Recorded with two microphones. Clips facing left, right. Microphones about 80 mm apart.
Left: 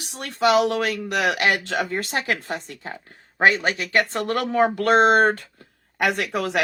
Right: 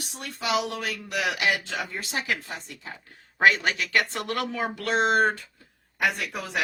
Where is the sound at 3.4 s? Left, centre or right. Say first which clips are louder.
Left 2 dB; left.